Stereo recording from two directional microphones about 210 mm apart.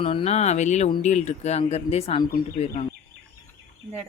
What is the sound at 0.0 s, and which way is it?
Speech, 25° left (ahead or behind).